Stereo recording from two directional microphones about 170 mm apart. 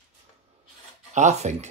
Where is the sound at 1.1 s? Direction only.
45° right (ahead or behind).